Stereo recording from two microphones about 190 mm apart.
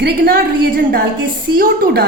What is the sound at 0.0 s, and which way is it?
A woman's voice, 55° right (ahead or behind).